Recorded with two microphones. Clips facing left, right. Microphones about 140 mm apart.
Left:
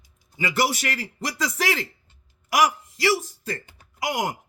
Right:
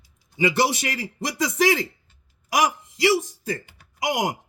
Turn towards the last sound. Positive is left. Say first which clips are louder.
# right 2 dB
turn(degrees=-20)  # may be behind; listen again after turning